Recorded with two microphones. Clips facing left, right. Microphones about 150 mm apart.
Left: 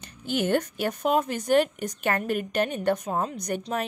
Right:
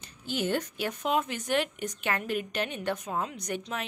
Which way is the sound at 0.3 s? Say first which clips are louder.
Left 5 dB; 55° left (ahead or behind).